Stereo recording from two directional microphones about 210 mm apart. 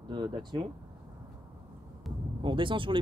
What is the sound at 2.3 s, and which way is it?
Speech, 25° right (ahead or behind).